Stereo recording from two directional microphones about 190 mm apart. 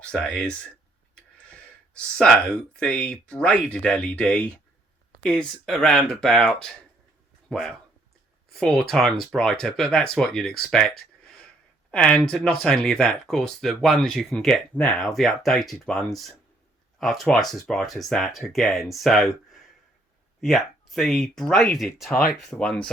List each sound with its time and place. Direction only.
0.0 s speech: 5° left (ahead or behind)
10.7 s a sound: 5° left (ahead or behind)
11.9 s speech: 5° left (ahead or behind)
20.4 s speech: centre (ahead or behind)